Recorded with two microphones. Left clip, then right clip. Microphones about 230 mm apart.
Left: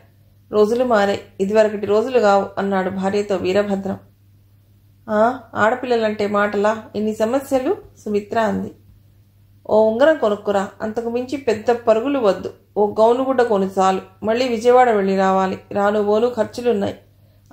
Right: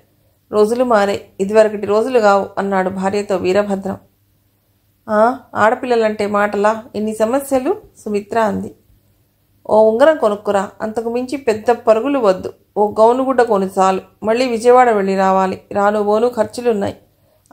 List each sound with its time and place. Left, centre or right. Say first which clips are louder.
0.5 s speech: right 3 dB; right
5.0 s speech: right 3 dB; right
9.6 s speech: right 4 dB; right